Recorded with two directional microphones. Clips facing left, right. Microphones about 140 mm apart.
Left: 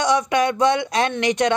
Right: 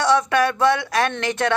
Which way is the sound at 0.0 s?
15° left (ahead or behind).